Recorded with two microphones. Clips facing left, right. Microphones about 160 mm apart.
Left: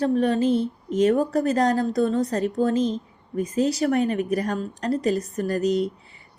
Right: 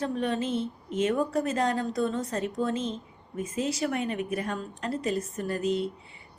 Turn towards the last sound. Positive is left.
turn(degrees=40)  # may be behind; listen again after turning